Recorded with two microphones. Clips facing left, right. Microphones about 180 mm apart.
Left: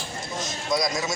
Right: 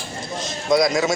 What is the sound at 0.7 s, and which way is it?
Speech, 65° right (ahead or behind).